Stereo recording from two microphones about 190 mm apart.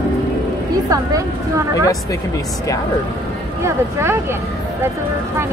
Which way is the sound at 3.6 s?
15° right (ahead or behind).